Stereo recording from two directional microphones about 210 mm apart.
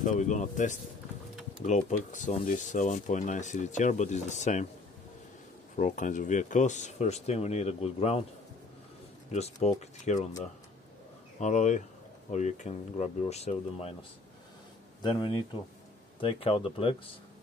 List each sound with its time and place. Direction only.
0.0 s speech: 35° left (ahead or behind)
5.8 s speech: 35° left (ahead or behind)
9.3 s speech: 30° left (ahead or behind)
11.3 s speech: 35° left (ahead or behind)
15.0 s speech: 20° left (ahead or behind)